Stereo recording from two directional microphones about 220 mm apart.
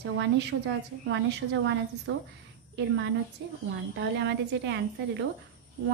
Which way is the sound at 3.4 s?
50° right (ahead or behind).